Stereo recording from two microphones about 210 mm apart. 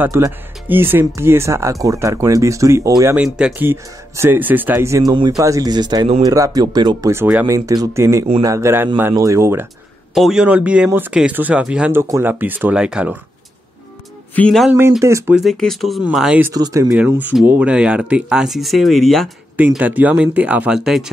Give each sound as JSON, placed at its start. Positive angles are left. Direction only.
{"t": 0.0, "sound": "speech", "side_deg": -10}
{"t": 3.2, "sound": "speech", "side_deg": -5}
{"t": 10.1, "sound": "speech", "side_deg": 0}
{"t": 14.3, "sound": "speech", "side_deg": 5}
{"t": 14.8, "sound": "speech", "side_deg": -15}
{"t": 15.4, "sound": "speech", "side_deg": 0}
{"t": 16.9, "sound": "speech", "side_deg": -5}